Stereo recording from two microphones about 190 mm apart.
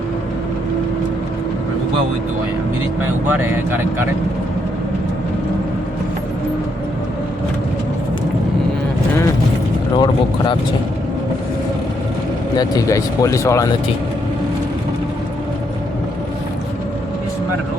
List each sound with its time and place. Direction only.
3.2 s speech: 10° right (ahead or behind)
10.0 s speech: 25° left (ahead or behind)
12.5 s speech: 20° left (ahead or behind)